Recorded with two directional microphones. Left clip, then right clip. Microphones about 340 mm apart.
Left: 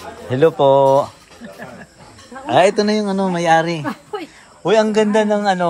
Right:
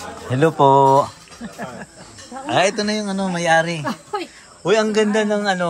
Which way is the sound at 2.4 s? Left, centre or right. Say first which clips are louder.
Left 5 dB; centre.